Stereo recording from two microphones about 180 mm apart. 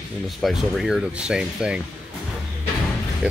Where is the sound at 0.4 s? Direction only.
Centre (ahead or behind).